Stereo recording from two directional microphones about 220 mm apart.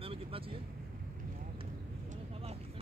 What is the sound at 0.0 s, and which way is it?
Vehicle, 25° right (ahead or behind).